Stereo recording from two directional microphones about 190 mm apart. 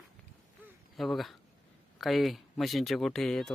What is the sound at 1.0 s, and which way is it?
Speech, centre (ahead or behind).